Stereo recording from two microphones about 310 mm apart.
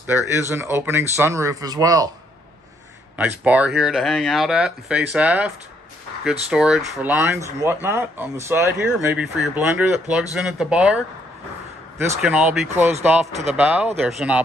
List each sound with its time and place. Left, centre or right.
0.0 s speech: centre
3.2 s speech: centre
6.5 s speech: centre
12.2 s speech: centre
13.3 s speech: right
13.6 s speech: centre